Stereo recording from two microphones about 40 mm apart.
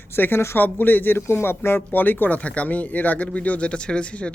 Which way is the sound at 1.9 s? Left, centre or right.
Left.